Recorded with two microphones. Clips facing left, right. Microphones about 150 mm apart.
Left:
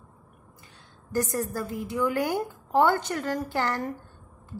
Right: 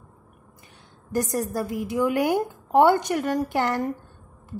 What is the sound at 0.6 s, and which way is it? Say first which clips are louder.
A woman's voice: right 2 dB; 20° right (ahead or behind).